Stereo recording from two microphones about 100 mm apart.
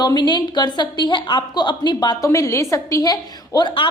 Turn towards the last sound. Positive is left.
turn(degrees=50)  # may be behind; listen again after turning